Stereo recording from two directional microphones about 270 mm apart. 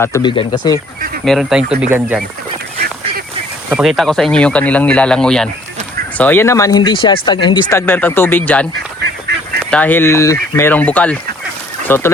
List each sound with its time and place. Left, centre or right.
0.0 s speech: centre
1.2 s speech: centre
3.7 s speech: centre